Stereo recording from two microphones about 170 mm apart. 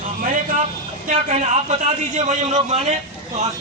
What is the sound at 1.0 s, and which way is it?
A man's voice, 45° right (ahead or behind).